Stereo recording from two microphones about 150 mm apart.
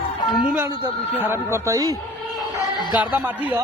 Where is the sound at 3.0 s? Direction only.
10° right (ahead or behind).